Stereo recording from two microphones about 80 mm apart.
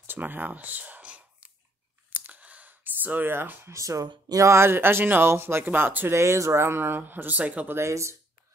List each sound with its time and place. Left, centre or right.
0.0 s a sound: right
4.3 s speech: right
7.8 s speech: right